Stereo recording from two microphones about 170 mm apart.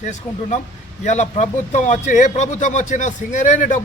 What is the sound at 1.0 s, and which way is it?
Speech, 45° left (ahead or behind).